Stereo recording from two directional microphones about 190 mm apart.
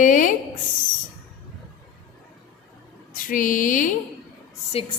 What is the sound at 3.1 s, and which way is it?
Speech, 45° left (ahead or behind).